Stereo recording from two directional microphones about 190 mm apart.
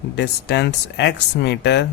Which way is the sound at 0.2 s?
60° left (ahead or behind).